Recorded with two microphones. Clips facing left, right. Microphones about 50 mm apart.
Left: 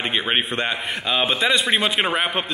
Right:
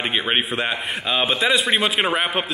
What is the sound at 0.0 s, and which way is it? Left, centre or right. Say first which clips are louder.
A man's voice: even; centre.